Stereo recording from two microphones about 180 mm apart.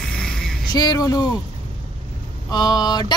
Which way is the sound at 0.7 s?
20° left (ahead or behind).